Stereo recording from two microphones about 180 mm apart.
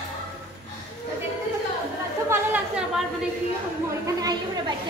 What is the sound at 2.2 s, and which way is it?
Chatter, 10° right (ahead or behind).